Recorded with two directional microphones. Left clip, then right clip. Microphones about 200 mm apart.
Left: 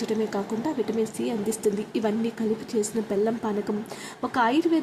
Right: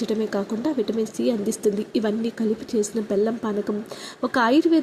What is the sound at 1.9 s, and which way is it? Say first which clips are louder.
Speech: right 2 dB; 15° right (ahead or behind).